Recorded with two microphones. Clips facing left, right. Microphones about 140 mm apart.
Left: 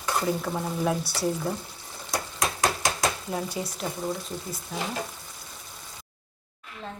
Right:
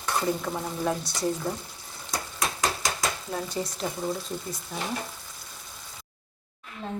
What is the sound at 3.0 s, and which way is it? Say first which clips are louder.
Stir: left 2 dB; 15° left (ahead or behind).